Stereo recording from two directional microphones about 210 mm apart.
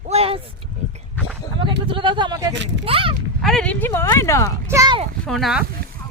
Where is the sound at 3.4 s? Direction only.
5° left (ahead or behind).